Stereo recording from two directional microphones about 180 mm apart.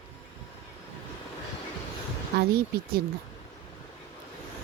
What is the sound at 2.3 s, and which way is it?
Speech, 65° right (ahead or behind).